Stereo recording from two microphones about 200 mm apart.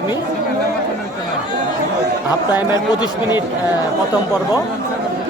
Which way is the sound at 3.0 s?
20° left (ahead or behind).